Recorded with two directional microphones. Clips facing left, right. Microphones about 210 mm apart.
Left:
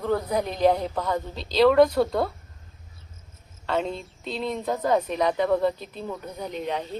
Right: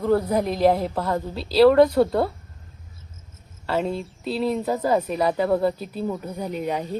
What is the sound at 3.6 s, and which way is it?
Speech, 5° right (ahead or behind).